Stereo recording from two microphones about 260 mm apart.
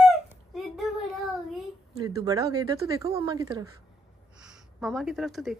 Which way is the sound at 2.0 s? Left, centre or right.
Centre.